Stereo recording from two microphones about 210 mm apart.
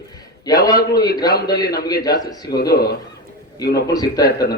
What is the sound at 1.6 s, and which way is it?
Speech, 50° left (ahead or behind).